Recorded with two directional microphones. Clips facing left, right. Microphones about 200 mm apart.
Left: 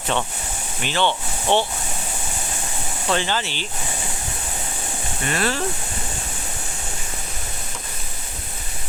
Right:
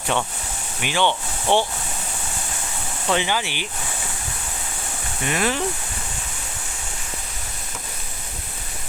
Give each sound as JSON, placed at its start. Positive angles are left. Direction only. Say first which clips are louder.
{"t": 0.8, "sound": "speech", "louder": "even", "side_deg": -10}
{"t": 1.5, "sound": "speech", "louder": "even", "side_deg": 15}
{"t": 3.1, "sound": "speech", "louder": "right 1 dB", "side_deg": -10}
{"t": 5.2, "sound": "speech", "louder": "right 1 dB", "side_deg": -15}